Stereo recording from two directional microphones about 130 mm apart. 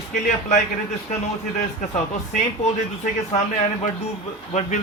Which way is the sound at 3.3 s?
60° left (ahead or behind).